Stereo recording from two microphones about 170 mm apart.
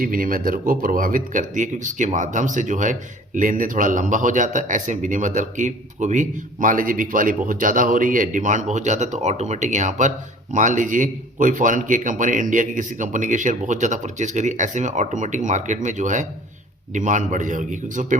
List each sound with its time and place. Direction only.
0.0 s speech: 55° right (ahead or behind)